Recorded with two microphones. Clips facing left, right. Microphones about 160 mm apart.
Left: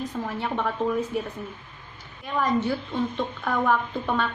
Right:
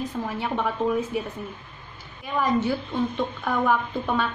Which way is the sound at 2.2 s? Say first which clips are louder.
Right 1 dB; 5° right (ahead or behind).